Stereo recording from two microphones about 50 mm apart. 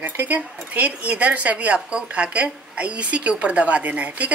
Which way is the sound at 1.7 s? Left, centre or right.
Centre.